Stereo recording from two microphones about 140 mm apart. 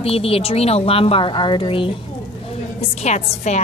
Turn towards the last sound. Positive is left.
turn(degrees=55)  # may be behind; listen again after turning